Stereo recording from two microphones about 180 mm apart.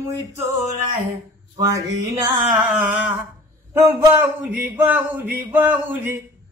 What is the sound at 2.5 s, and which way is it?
A man's voice, 5° right (ahead or behind).